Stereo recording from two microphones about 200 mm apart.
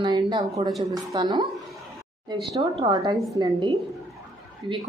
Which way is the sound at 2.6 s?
25° right (ahead or behind).